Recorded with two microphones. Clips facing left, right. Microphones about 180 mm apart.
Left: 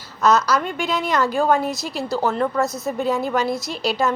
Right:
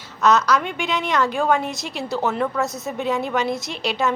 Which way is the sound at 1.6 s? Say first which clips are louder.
Left 3 dB; 35° left (ahead or behind).